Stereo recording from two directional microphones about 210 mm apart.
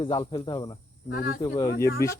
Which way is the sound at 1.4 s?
25° left (ahead or behind).